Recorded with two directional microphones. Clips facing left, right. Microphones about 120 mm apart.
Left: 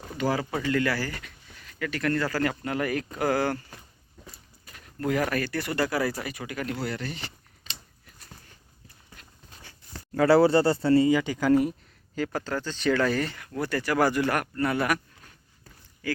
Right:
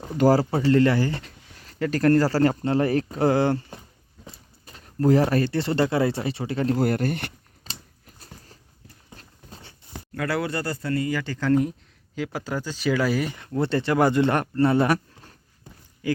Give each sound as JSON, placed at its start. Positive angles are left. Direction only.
{"t": 0.2, "sound": "speech", "side_deg": -35}
{"t": 6.7, "sound": "speech", "side_deg": -50}
{"t": 7.6, "sound": "a sound", "side_deg": -35}
{"t": 9.1, "sound": "clip-clop", "side_deg": -30}
{"t": 10.2, "sound": "speech", "side_deg": 30}
{"t": 12.1, "sound": "speech", "side_deg": -5}
{"t": 13.3, "sound": "speech", "side_deg": -25}
{"t": 16.0, "sound": "speech", "side_deg": -20}